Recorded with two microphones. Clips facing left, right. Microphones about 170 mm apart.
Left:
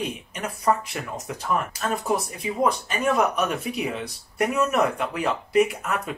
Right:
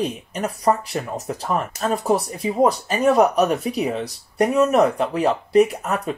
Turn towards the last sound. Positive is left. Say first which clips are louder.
# right 4 dB
turn(degrees=-35)  # may be behind; listen again after turning